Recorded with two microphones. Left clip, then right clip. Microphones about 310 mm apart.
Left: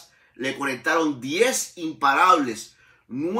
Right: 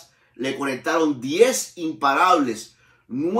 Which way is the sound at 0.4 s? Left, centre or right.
Centre.